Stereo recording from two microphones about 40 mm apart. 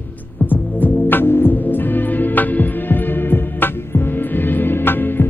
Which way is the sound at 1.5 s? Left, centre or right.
Left.